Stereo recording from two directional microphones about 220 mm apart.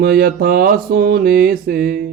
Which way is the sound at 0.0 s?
45° right (ahead or behind).